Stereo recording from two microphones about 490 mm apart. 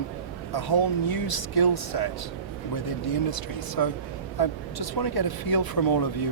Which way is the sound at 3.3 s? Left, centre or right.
Left.